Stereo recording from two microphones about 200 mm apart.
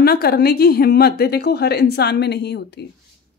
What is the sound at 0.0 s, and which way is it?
A woman's voice, 50° left (ahead or behind).